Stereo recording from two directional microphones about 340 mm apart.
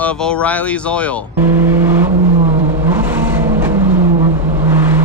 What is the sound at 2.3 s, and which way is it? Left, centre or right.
Vehicle, centre.